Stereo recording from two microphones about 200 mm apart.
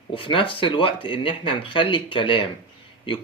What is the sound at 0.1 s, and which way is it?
Speech, 25° left (ahead or behind).